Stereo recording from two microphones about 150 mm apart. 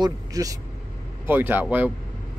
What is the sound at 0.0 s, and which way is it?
Speech, 25° right (ahead or behind).